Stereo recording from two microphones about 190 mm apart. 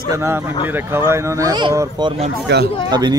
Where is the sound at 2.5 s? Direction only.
65° right (ahead or behind).